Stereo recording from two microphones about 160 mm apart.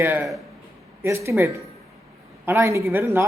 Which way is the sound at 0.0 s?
10° right (ahead or behind).